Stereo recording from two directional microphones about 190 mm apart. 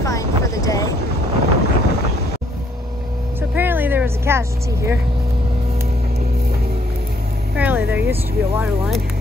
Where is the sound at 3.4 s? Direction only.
10° right (ahead or behind).